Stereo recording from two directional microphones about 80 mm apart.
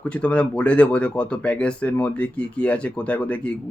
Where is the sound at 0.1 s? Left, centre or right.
Centre.